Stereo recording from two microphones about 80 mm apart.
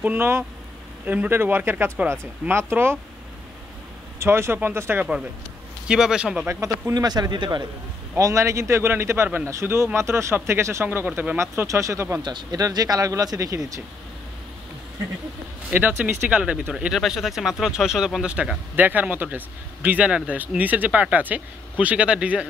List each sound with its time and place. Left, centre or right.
0.0 s speech: right
4.2 s a man's voice: right
5.9 s speech: centre
6.9 s speech: right
8.2 s a man's voice: right
11.5 s a man's voice: right
12.2 s speech: right
12.5 s speech: right
15.7 s speech: right
16.9 s speech: centre